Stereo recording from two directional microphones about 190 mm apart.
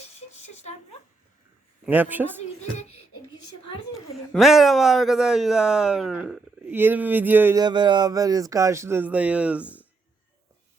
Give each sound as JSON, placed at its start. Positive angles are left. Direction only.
{"t": 0.2, "sound": "a sound", "side_deg": 35}
{"t": 1.8, "sound": "speech", "side_deg": -10}
{"t": 4.4, "sound": "speech", "side_deg": 0}
{"t": 7.6, "sound": "speech", "side_deg": -25}